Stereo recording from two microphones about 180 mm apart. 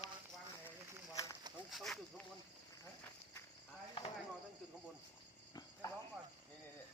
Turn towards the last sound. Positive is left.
turn(degrees=20)  # may be behind; listen again after turning